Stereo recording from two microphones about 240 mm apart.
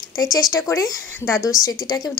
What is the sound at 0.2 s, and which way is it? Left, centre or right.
Speech, centre.